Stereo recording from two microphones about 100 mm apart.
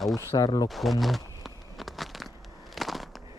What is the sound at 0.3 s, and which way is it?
Speech, 40° left (ahead or behind).